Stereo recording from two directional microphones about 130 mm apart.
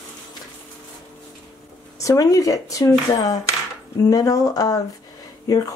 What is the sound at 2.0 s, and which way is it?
Speech, 25° left (ahead or behind).